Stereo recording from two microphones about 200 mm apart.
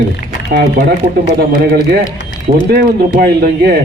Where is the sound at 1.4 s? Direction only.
50° right (ahead or behind).